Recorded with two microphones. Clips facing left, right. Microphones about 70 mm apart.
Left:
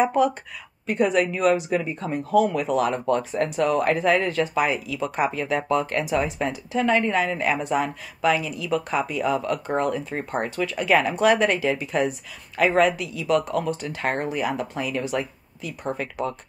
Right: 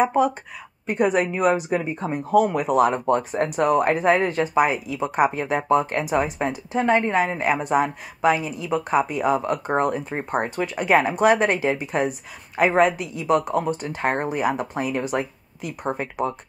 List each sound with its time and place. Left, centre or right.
0.0 s a woman's voice: right
2.3 s speech: right
2.7 s speech: right